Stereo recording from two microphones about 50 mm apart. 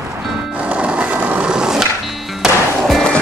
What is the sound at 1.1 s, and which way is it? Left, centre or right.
Skateboard, right.